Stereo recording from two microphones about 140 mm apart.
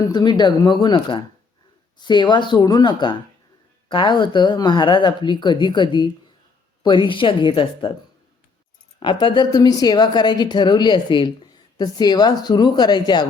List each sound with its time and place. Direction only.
0.0 s a woman's voice: 30° left (ahead or behind)
9.2 s a woman's voice: 30° left (ahead or behind)